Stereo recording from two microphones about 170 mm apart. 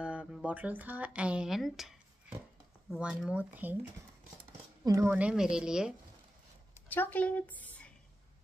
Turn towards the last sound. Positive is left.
turn(degrees=10)  # may be behind; listen again after turning